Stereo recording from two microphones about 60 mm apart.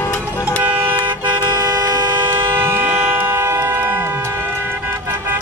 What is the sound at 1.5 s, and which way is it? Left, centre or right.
Toot, right.